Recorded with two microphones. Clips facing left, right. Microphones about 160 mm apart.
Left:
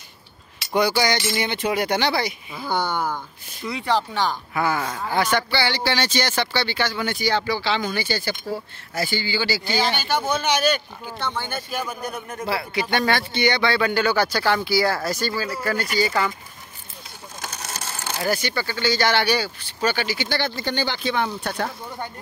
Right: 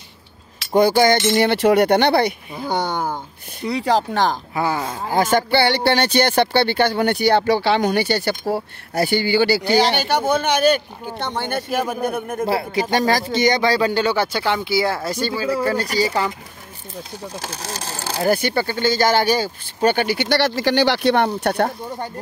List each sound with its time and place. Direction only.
0.7 s cutlery: 50° right (ahead or behind)
1.3 s speech: 65° right (ahead or behind)
2.7 s speech: 20° right (ahead or behind)
3.6 s a man's voice: 35° right (ahead or behind)
4.6 s speech: 25° right (ahead or behind)
5.1 s speech: 45° right (ahead or behind)
11.1 s a man's voice: 65° right (ahead or behind); by 16.1 s 35° right (ahead or behind)
17.4 s speech: 30° right (ahead or behind)
18.3 s speech: 55° right (ahead or behind)